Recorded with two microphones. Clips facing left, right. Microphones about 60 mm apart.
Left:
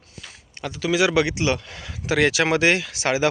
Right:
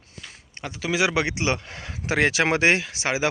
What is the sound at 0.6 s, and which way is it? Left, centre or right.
Speech, right.